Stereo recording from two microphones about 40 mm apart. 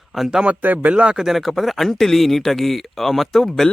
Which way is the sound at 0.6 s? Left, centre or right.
Right.